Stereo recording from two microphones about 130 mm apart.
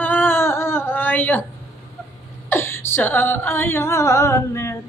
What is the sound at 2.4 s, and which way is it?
Speech, 20° left (ahead or behind).